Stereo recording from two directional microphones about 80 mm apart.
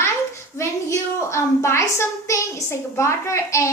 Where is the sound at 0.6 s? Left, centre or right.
Left.